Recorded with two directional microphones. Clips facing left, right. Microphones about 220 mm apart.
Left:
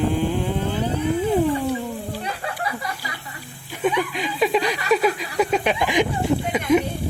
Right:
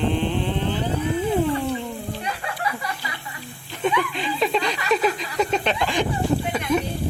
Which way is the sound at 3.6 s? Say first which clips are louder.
Left 1 dB; 10° left (ahead or behind).